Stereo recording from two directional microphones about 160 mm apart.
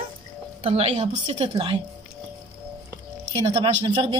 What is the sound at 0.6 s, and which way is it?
Speech, 40° right (ahead or behind).